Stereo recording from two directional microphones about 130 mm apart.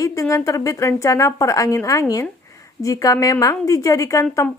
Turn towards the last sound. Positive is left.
turn(degrees=25)  # may be behind; listen again after turning